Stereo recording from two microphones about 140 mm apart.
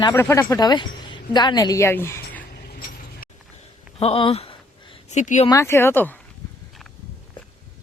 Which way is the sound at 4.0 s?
40° left (ahead or behind).